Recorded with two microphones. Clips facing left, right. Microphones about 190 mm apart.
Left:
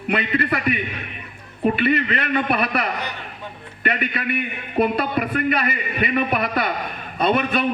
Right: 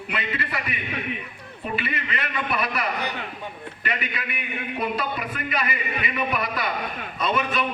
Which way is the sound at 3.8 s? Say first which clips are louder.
Left 7 dB; 60° left (ahead or behind).